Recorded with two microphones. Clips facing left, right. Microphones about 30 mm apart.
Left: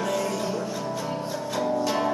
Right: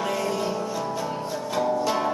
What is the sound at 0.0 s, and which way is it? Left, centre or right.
Music, centre.